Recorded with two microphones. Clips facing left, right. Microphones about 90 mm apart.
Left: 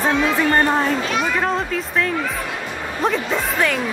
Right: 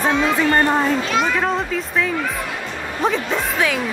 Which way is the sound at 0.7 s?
Centre (ahead or behind).